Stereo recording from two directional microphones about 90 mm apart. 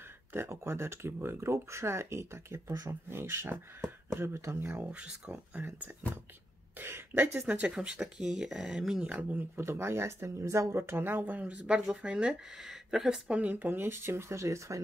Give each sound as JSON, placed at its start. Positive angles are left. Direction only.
{"t": 0.3, "sound": "speech", "side_deg": -25}
{"t": 4.7, "sound": "speech", "side_deg": -10}
{"t": 5.6, "sound": "speech", "side_deg": -20}
{"t": 6.8, "sound": "throat clearing", "side_deg": -25}
{"t": 7.6, "sound": "speech", "side_deg": -10}
{"t": 9.6, "sound": "speech", "side_deg": -30}